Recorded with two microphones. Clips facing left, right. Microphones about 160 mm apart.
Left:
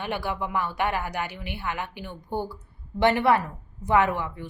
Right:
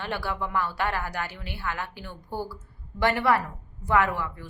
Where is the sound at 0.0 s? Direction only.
15° left (ahead or behind).